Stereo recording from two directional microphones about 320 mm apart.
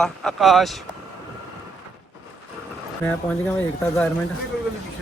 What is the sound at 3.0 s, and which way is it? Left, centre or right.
Speech, centre.